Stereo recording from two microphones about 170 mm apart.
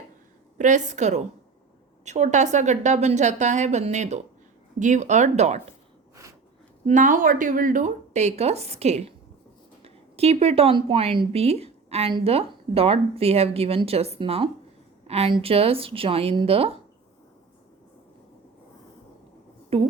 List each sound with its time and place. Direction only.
0.6 s speech: 45° right (ahead or behind)
6.8 s a woman's voice: 50° right (ahead or behind); by 16.7 s 35° right (ahead or behind)
19.7 s a woman's voice: 35° right (ahead or behind)